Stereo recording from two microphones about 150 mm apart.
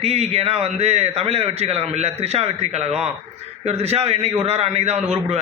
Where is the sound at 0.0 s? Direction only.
45° right (ahead or behind).